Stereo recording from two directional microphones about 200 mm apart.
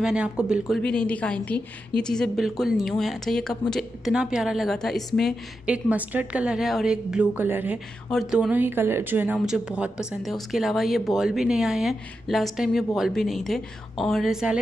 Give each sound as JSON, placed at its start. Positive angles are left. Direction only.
{"t": 0.0, "sound": "a woman's voice", "side_deg": -5}